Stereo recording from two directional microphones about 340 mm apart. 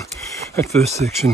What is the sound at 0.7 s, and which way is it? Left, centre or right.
Speech, centre.